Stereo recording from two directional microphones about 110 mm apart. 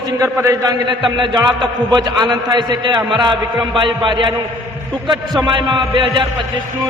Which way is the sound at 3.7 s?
50° right (ahead or behind).